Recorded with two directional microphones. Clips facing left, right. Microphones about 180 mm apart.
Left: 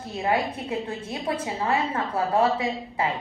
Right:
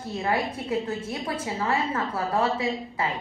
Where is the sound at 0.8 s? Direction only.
30° left (ahead or behind).